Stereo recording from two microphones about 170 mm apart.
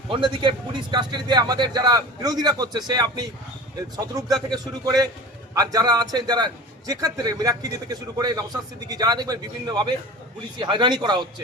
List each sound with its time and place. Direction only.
0.1 s a man's voice: 30° right (ahead or behind)